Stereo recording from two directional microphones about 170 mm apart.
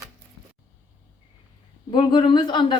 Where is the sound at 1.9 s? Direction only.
30° left (ahead or behind).